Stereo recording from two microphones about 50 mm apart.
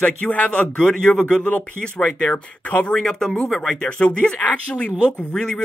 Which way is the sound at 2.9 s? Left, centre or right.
Centre.